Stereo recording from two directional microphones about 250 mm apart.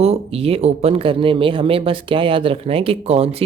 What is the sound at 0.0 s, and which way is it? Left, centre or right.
Speech, right.